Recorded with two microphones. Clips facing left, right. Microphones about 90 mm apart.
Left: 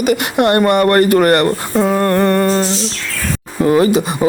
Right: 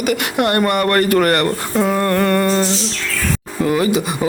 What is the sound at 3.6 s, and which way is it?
Speech, 40° left (ahead or behind).